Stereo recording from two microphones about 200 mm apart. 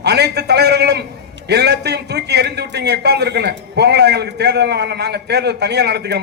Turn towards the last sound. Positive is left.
turn(degrees=-55)  # may be behind; listen again after turning